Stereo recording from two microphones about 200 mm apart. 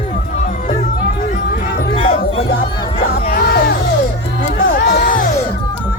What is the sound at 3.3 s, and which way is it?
Music, 50° left (ahead or behind).